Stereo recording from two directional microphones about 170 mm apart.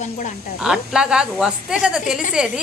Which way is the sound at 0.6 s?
5° right (ahead or behind).